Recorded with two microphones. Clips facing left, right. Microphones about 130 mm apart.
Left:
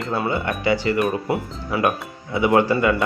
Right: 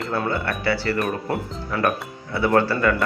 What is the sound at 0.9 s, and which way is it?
Speech, 5° left (ahead or behind).